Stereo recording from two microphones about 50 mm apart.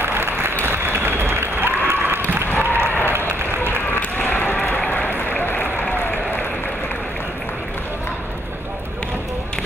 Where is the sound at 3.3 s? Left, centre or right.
Right.